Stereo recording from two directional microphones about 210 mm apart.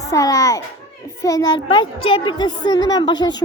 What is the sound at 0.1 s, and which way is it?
A child's voice, 15° left (ahead or behind).